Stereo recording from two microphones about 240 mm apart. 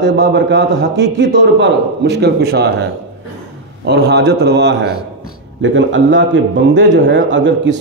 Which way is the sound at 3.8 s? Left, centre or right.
Right.